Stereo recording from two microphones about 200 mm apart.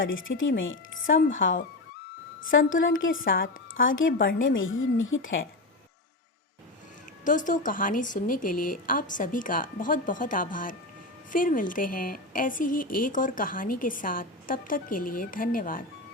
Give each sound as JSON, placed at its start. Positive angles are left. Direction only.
{"t": 0.1, "sound": "speech", "side_deg": 75}
{"t": 7.3, "sound": "a woman's voice", "side_deg": 40}